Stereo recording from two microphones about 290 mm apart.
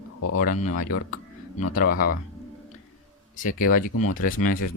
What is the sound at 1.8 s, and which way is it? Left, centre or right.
Speech, left.